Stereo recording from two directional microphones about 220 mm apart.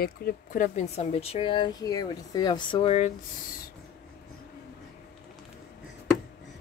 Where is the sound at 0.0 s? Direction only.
40° left (ahead or behind).